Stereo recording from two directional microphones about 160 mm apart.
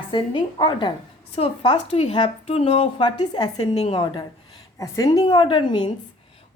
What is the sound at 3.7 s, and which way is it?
A woman's voice, 40° left (ahead or behind).